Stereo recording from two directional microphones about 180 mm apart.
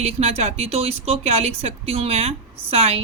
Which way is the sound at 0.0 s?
35° right (ahead or behind).